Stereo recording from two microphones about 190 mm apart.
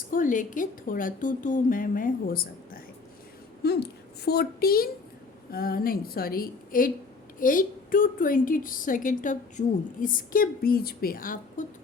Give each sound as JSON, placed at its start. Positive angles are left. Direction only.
{"t": 0.1, "sound": "a woman's voice", "side_deg": 45}